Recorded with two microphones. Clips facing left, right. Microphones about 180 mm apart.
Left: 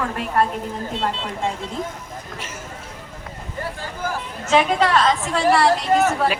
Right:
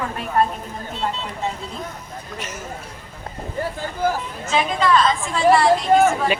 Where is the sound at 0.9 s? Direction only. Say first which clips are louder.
Right 1 dB; 90° left.